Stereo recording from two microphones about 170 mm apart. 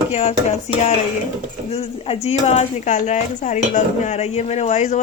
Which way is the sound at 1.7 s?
35° left (ahead or behind).